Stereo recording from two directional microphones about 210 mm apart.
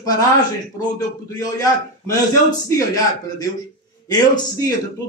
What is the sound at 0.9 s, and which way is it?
A man's voice, 15° left (ahead or behind).